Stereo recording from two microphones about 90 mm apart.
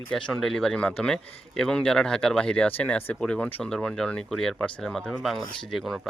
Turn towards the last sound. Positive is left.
turn(degrees=5)  # may be behind; listen again after turning